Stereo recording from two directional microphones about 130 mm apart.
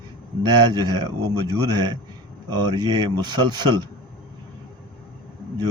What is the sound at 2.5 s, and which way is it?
Speech, 35° right (ahead or behind).